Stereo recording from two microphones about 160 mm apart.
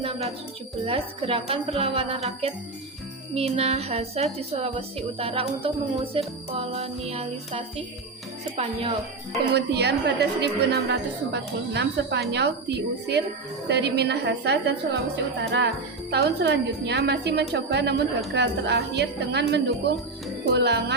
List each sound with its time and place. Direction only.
0.0 s music: 35° right (ahead or behind)
0.9 s a woman's voice: 35° right (ahead or behind)
9.6 s a woman's voice: 90° right